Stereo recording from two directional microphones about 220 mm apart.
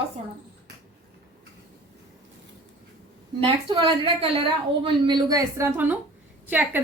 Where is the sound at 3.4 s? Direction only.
25° right (ahead or behind).